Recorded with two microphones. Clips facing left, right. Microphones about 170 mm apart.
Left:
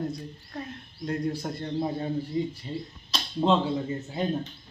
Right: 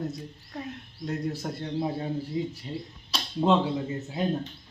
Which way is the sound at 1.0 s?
Centre (ahead or behind).